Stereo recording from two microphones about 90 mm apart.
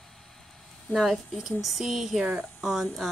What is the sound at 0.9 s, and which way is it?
Speech, 10° left (ahead or behind).